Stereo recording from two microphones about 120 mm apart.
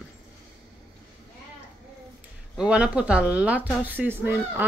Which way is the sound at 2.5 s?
10° right (ahead or behind).